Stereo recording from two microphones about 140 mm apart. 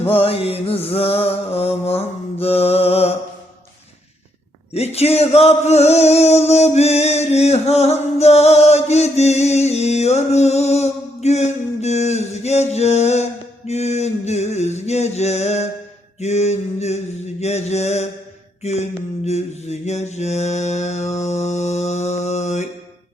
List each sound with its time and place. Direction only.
0.1 s mantra: 45° left (ahead or behind)
4.7 s music: 50° left (ahead or behind)
13.7 s a sound: 50° left (ahead or behind)
17.4 s mantra: 50° left (ahead or behind)